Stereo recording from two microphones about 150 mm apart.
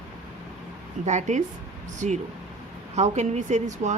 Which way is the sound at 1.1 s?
55° right (ahead or behind).